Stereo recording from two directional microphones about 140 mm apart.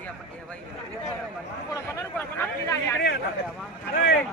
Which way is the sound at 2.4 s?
20° left (ahead or behind).